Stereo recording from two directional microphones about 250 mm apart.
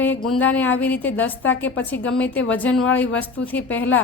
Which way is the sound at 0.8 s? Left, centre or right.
Centre.